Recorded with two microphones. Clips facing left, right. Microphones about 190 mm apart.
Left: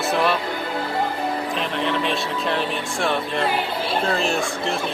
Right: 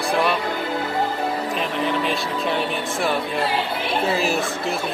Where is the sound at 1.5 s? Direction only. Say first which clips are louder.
Right 1 dB; centre (ahead or behind).